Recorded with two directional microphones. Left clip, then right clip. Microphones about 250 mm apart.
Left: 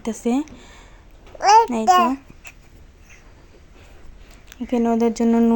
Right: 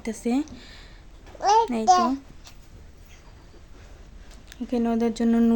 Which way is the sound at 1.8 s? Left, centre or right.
Left.